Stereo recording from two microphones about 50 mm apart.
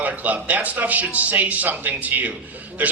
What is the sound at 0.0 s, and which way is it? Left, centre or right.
A man's voice, right.